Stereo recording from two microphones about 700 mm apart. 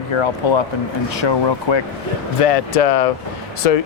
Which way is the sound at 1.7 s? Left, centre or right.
Left.